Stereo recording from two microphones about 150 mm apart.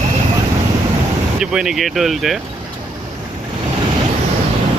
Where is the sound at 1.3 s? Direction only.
5° right (ahead or behind).